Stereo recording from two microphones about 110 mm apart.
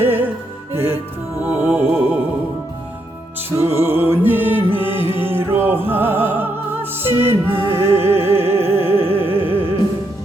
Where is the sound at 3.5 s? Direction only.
25° right (ahead or behind).